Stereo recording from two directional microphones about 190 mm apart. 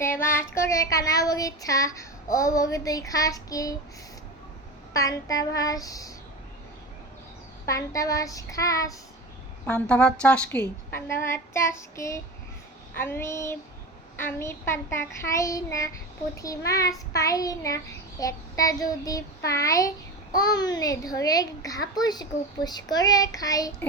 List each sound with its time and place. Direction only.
0.0 s child singing: 15° left (ahead or behind)
4.9 s child singing: 20° left (ahead or behind)
5.5 s a child's voice: 20° left (ahead or behind)
7.7 s child singing: 15° left (ahead or behind)
9.6 s child singing: 5° left (ahead or behind)
20.3 s a child's voice: 20° left (ahead or behind)